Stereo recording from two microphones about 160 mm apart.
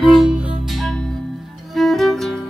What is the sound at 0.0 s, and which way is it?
Music, centre (ahead or behind).